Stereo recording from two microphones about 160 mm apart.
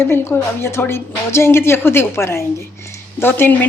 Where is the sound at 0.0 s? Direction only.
15° left (ahead or behind).